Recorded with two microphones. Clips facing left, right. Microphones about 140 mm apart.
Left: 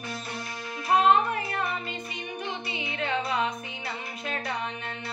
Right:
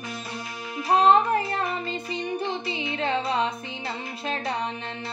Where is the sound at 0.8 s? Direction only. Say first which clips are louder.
Right 3 dB; 35° right (ahead or behind).